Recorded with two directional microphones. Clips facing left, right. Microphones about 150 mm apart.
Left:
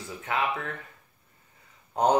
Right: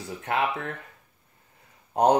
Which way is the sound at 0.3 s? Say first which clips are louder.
Right 2 dB; 45° right (ahead or behind).